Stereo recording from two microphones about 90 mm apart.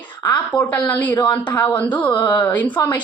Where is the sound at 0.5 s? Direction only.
15° left (ahead or behind).